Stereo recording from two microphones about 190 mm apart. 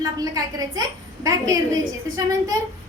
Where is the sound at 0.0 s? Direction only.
20° right (ahead or behind).